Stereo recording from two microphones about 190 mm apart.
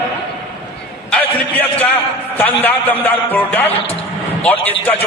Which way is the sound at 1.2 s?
10° left (ahead or behind).